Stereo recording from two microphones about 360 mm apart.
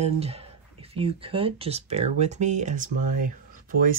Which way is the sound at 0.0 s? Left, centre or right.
Centre.